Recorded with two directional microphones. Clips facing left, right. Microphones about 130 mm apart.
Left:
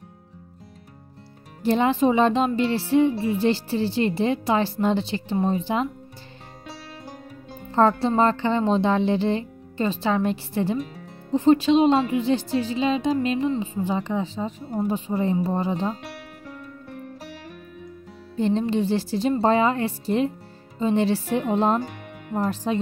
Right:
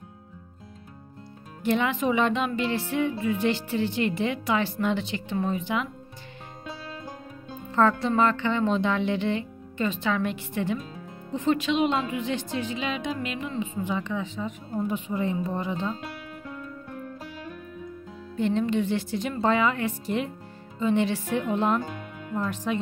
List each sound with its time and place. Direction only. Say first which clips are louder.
1.6 s music: left 5 dB; 35° left (ahead or behind)
7.7 s music: left 3 dB; 30° left (ahead or behind)
18.3 s music: left 2 dB; 30° left (ahead or behind)